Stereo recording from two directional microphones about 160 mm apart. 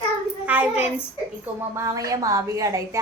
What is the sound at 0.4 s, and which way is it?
Speech, 10° right (ahead or behind).